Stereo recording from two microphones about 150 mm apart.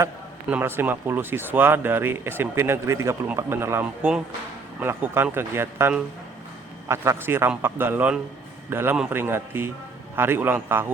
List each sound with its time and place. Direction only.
0.5 s speech: 15° right (ahead or behind)